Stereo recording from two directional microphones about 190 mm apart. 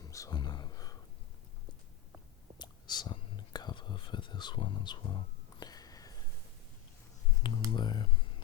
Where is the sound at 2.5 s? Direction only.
20° left (ahead or behind).